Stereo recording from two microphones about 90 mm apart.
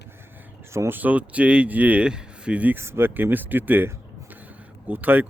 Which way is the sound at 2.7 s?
30° right (ahead or behind).